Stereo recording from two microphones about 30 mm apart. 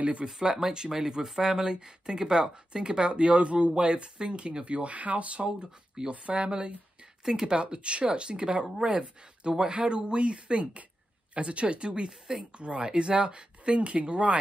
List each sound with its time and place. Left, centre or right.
0.4 s speech: right
0.9 s speech: centre; by 7.1 s right
7.2 s speech: centre
7.5 s speech: right
12.1 s speech: centre
12.5 s speech: right